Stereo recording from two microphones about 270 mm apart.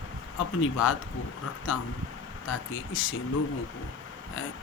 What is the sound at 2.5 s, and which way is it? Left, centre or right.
Speech, left.